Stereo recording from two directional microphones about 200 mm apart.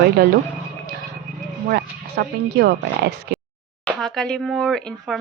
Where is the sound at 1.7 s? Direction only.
55° right (ahead or behind).